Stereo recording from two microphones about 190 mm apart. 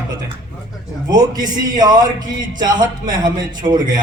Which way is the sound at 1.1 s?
20° right (ahead or behind).